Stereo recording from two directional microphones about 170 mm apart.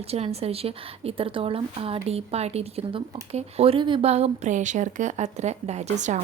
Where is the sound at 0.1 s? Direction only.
35° right (ahead or behind).